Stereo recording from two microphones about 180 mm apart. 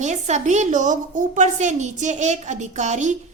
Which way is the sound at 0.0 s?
40° right (ahead or behind).